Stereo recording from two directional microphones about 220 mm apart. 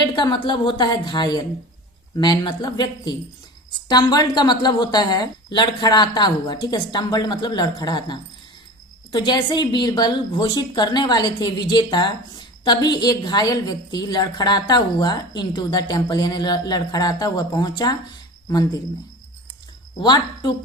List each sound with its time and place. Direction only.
0.0 s a woman's voice: 20° left (ahead or behind)
20.0 s a woman's voice: 20° left (ahead or behind)